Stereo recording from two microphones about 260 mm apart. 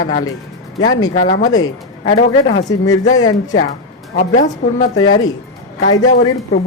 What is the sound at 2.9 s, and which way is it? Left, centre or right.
Speech, left.